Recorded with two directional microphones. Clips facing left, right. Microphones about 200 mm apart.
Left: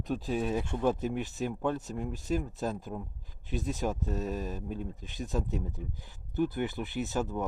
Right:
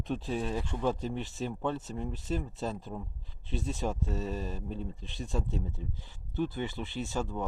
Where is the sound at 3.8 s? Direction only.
Centre (ahead or behind).